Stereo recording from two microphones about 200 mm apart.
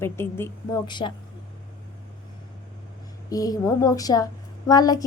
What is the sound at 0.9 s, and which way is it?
Speech, 25° left (ahead or behind).